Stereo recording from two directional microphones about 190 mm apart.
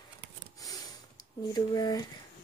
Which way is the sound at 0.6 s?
20° left (ahead or behind).